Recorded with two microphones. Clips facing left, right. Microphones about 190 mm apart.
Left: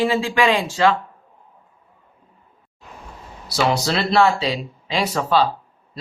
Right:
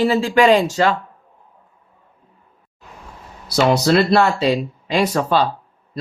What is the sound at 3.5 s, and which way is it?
Speech, 55° right (ahead or behind).